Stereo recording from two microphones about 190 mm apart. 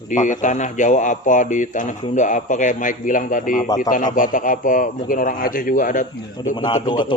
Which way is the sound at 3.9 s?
45° left (ahead or behind).